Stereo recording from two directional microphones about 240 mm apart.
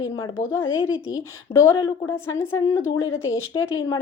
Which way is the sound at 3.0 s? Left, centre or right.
Left.